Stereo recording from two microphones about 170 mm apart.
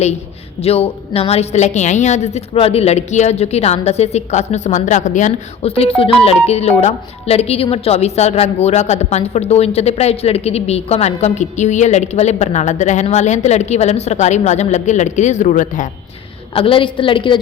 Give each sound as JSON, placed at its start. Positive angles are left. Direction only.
{"t": 0.6, "sound": "a woman's voice", "side_deg": 35}
{"t": 16.6, "sound": "a woman's voice", "side_deg": 30}